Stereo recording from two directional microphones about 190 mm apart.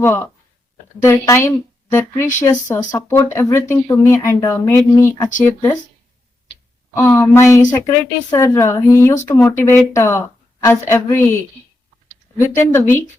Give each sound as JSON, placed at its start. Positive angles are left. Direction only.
{"t": 0.0, "sound": "speech", "side_deg": 15}
{"t": 6.9, "sound": "speech", "side_deg": 10}
{"t": 12.5, "sound": "speech", "side_deg": 15}